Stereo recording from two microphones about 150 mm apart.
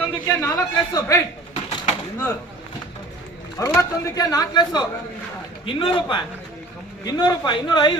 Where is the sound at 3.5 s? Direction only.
20° left (ahead or behind).